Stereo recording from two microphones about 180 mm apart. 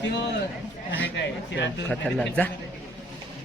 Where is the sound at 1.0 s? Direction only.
75° left (ahead or behind).